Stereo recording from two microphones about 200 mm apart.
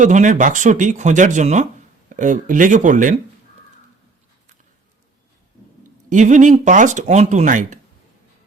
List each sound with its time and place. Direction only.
0.0 s speech: 40° right (ahead or behind)
6.1 s speech: 40° right (ahead or behind)